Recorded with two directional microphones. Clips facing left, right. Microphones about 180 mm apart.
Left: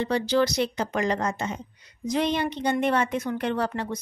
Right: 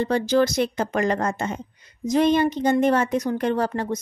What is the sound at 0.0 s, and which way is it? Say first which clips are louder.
A woman's voice: right 3 dB; 45° right (ahead or behind).